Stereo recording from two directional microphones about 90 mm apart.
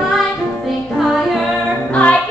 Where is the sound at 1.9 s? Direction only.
15° left (ahead or behind).